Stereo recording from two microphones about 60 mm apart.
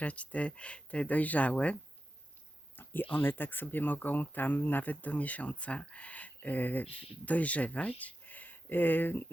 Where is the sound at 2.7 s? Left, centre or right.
Left.